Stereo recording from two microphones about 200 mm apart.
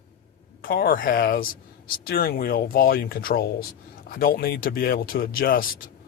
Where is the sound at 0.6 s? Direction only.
50° left (ahead or behind).